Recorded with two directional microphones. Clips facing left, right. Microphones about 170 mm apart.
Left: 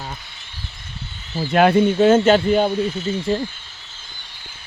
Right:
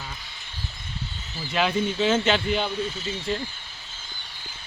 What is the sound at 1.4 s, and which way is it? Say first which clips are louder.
Speech: left 10 dB; 55° left (ahead or behind).